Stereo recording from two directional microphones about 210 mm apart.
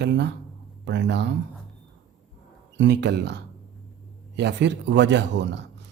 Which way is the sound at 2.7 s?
55° right (ahead or behind).